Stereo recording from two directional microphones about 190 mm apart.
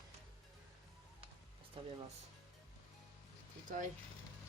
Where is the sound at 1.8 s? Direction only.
25° right (ahead or behind).